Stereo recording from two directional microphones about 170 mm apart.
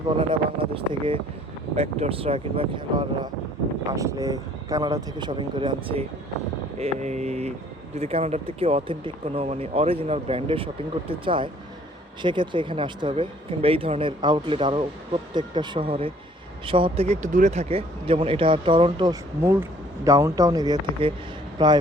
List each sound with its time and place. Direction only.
0.2 s speech: 30° right (ahead or behind)
3.8 s speech: 20° right (ahead or behind)
6.7 s speech: 40° right (ahead or behind)
19.4 s speech: 15° right (ahead or behind)